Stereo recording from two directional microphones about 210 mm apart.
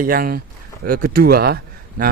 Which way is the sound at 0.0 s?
45° right (ahead or behind).